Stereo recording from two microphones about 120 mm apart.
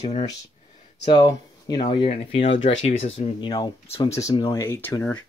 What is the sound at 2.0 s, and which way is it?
Speech, 55° left (ahead or behind).